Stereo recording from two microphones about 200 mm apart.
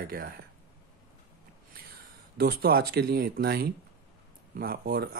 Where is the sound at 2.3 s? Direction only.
50° right (ahead or behind).